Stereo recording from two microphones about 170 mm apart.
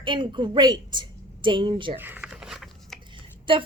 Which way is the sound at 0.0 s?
30° right (ahead or behind).